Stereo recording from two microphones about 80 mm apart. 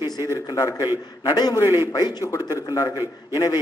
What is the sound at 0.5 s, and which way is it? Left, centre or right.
A man's voice, left.